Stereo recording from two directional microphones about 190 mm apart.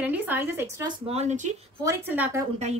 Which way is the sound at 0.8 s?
35° right (ahead or behind).